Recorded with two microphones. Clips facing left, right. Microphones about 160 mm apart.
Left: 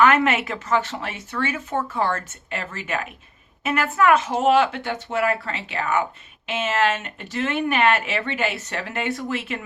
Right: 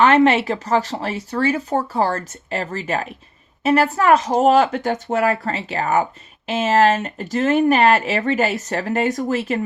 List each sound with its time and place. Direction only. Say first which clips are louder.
0.0 s speech: right 4 dB; 30° right (ahead or behind)